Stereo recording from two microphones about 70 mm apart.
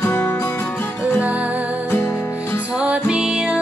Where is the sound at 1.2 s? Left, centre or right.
Right.